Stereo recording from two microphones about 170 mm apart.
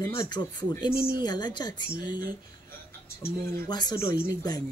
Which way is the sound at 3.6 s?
25° left (ahead or behind).